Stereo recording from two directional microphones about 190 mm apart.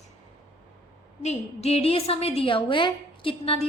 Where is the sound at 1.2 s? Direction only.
35° left (ahead or behind).